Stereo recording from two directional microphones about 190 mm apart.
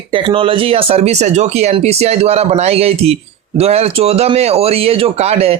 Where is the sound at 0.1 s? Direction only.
25° right (ahead or behind).